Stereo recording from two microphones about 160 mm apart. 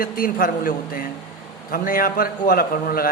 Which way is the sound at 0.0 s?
60° left (ahead or behind).